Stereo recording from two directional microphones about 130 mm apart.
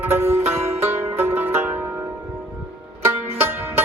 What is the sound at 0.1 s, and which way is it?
Music, 20° right (ahead or behind).